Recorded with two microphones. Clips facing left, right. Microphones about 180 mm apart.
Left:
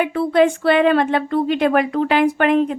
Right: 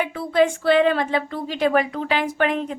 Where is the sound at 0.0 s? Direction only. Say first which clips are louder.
Left 4 dB; 60° left (ahead or behind).